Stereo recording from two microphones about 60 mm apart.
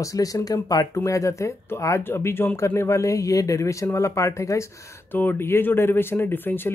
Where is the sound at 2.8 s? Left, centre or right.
Left.